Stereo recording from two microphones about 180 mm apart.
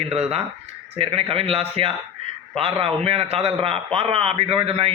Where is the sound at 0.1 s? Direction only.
35° right (ahead or behind).